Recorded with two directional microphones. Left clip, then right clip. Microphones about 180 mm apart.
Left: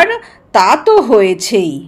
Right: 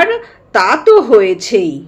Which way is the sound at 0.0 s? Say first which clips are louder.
Left 1 dB; 35° left (ahead or behind).